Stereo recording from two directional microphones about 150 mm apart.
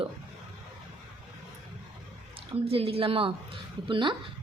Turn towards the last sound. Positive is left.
turn(degrees=-35)  # may be behind; listen again after turning